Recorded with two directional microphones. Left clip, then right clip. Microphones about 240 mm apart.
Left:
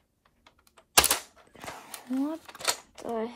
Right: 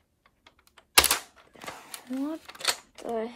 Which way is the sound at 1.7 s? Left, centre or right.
Left.